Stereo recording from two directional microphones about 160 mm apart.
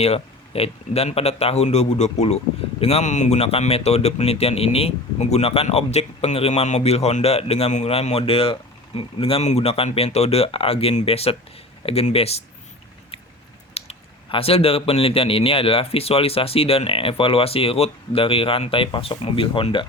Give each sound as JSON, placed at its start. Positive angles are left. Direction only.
{"t": 0.0, "sound": "speech", "side_deg": 40}
{"t": 13.7, "sound": "speech", "side_deg": 40}